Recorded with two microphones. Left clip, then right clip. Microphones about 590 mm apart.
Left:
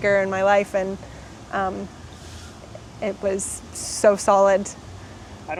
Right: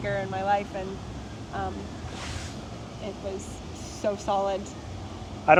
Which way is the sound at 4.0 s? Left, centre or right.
Left.